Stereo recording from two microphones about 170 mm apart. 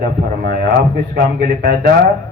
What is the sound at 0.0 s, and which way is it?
A man's voice, 60° right (ahead or behind).